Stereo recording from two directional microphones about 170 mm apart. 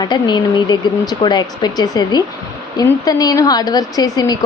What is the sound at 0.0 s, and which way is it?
Speech, 25° left (ahead or behind).